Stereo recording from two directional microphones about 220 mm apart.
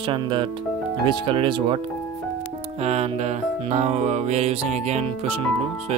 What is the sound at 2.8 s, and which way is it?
Music, 30° right (ahead or behind).